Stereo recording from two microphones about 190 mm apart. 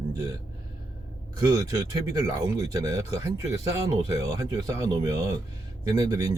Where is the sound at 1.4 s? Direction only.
20° right (ahead or behind).